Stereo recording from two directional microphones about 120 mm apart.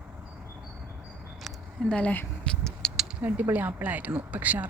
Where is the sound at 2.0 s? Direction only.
10° left (ahead or behind).